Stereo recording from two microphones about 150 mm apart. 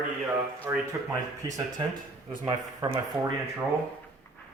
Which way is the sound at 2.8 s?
30° right (ahead or behind).